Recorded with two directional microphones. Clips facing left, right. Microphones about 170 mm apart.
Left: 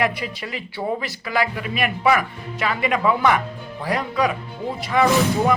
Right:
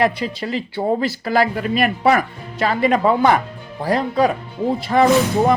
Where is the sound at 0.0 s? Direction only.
30° right (ahead or behind).